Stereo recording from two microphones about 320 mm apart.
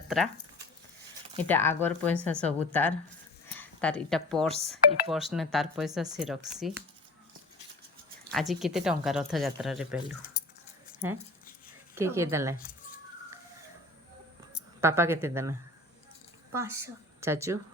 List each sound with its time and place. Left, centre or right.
1.4 s speech: centre
8.3 s speech: centre
11.9 s a woman's voice: centre
14.8 s a woman's voice: centre